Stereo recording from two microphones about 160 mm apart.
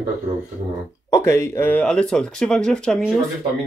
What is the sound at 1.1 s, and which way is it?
Speech, 15° left (ahead or behind).